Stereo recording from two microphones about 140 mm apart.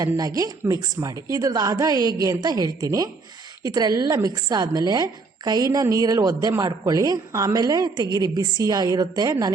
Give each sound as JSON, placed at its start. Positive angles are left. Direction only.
{"t": 0.0, "sound": "a woman's voice", "side_deg": -25}